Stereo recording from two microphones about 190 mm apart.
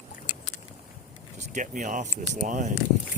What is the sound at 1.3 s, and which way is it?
Speech, 40° right (ahead or behind).